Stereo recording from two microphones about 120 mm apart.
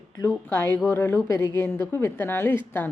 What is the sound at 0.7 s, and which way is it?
Speech, 15° left (ahead or behind).